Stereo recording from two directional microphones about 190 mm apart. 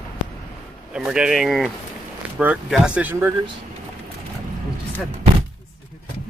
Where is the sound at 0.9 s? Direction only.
5° right (ahead or behind).